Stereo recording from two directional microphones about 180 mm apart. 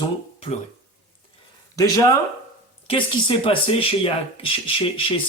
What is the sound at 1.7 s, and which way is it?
Speech, 20° left (ahead or behind).